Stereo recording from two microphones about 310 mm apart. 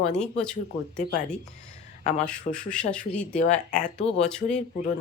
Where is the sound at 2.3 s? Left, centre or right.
Centre.